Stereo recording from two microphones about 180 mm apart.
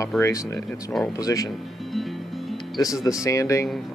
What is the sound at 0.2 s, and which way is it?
Speech, 15° left (ahead or behind).